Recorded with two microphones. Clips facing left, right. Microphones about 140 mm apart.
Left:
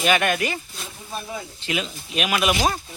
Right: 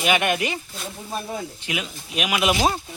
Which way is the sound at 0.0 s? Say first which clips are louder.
Left 1 dB; 15° right (ahead or behind).